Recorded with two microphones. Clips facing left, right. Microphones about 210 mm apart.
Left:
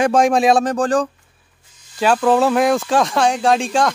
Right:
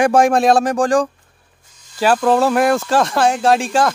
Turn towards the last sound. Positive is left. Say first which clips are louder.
# right 1 dB
turn(degrees=-5)  # may be behind; listen again after turning